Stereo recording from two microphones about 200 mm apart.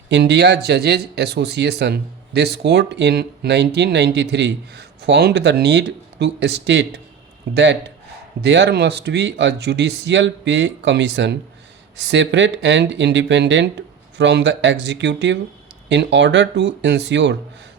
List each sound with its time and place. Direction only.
0.1 s speech: 55° right (ahead or behind)